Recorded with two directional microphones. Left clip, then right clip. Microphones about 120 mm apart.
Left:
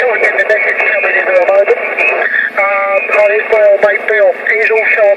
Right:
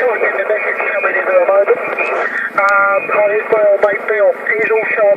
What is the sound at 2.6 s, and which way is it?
Music, 40° left (ahead or behind).